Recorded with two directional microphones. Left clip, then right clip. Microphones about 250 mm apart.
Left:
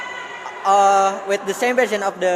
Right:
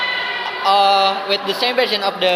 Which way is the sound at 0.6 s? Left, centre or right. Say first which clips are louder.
Even; left.